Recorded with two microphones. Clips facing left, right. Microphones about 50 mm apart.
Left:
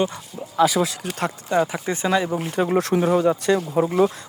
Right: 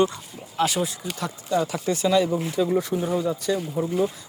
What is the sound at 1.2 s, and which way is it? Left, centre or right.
Speech, left.